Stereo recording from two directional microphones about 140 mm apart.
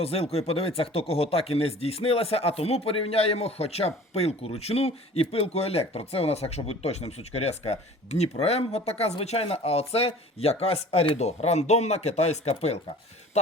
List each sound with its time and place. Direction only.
0.0 s speech: 45° left (ahead or behind)